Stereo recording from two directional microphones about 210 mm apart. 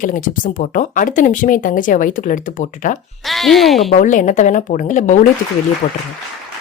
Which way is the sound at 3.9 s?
40° left (ahead or behind).